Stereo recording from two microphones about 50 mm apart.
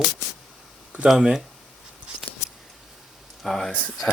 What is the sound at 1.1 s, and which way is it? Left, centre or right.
Speech, centre.